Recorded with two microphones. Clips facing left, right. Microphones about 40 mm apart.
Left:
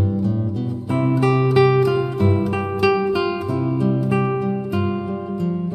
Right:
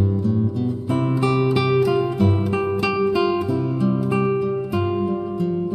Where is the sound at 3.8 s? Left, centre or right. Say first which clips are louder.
Right 1 dB; centre.